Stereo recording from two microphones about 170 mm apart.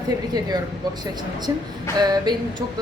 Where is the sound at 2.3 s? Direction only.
25° right (ahead or behind).